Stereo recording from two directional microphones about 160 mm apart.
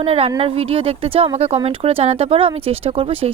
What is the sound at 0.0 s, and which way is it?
A woman's voice, 35° right (ahead or behind).